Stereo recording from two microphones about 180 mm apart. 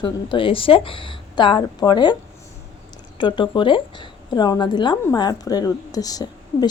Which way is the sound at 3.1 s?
25° left (ahead or behind).